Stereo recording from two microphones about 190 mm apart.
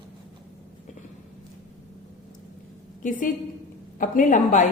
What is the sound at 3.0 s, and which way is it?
A woman's voice, 45° left (ahead or behind).